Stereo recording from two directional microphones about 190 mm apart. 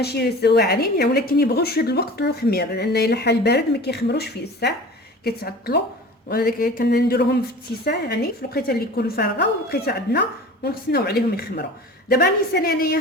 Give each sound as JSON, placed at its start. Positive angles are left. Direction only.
{"t": 0.0, "sound": "a woman's voice", "side_deg": 60}